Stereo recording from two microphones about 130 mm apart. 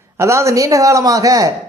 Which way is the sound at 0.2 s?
20° right (ahead or behind).